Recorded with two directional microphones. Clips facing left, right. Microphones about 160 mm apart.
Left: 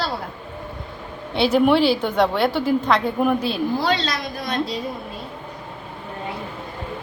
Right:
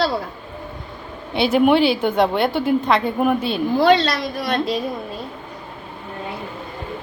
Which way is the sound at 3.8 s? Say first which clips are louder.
Right 7 dB; 65° right (ahead or behind).